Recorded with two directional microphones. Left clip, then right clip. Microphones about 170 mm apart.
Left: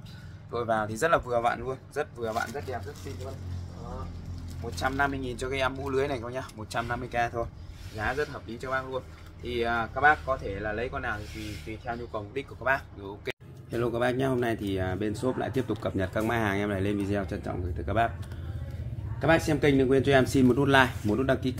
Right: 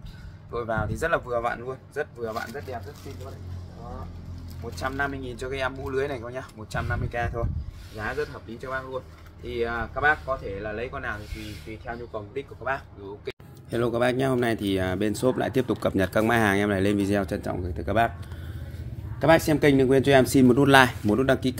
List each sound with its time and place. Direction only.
0.5 s speech: 5° left (ahead or behind)
4.6 s speech: 5° left (ahead or behind)
11.8 s speech: 20° left (ahead or behind)
13.7 s speech: 40° right (ahead or behind)
19.1 s speech: 55° right (ahead or behind)